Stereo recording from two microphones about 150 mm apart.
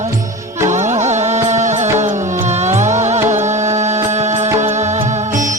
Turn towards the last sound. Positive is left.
turn(degrees=-45)  # may be behind; listen again after turning